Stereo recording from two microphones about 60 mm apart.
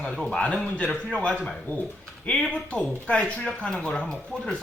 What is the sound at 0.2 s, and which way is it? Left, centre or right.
Speech, centre.